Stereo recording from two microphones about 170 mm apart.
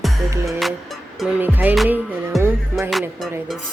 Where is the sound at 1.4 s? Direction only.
10° right (ahead or behind).